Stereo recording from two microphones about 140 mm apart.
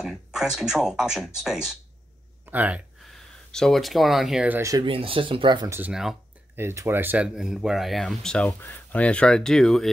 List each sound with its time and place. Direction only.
0.0 s speech: centre (ahead or behind)
3.1 s speech: 5° left (ahead or behind)
4.6 s speech: 25° right (ahead or behind)
4.8 s speech: 40° right (ahead or behind)
5.7 s speech: 10° right (ahead or behind)
6.5 s speech: 20° right (ahead or behind)
7.3 s speech: 5° right (ahead or behind)